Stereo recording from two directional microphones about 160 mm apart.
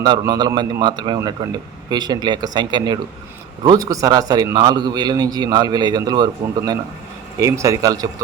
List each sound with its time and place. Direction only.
0.0 s a man's voice: 25° right (ahead or behind)